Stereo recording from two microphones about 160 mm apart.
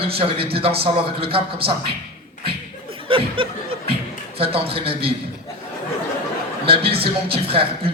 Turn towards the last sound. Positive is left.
turn(degrees=-35)  # may be behind; listen again after turning